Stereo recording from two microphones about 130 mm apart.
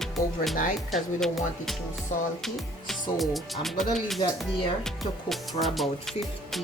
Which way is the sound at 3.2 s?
Centre (ahead or behind).